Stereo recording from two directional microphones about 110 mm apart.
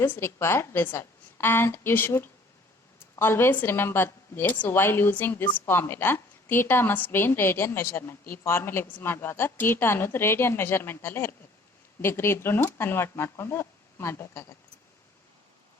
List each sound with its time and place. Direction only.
0.0 s a woman's voice: 20° left (ahead or behind)